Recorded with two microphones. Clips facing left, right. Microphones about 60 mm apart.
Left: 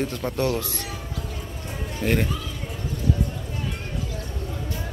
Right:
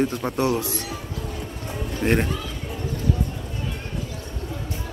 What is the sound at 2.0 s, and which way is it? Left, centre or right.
Speech, right.